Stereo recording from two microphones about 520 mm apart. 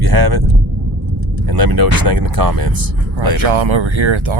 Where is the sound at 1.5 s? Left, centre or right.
Right.